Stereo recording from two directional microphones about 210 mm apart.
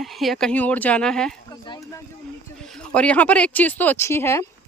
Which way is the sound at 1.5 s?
20° left (ahead or behind).